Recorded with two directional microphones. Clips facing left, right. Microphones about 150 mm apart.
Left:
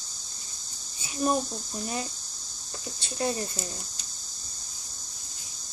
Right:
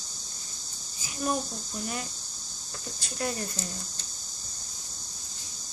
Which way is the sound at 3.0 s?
25° left (ahead or behind).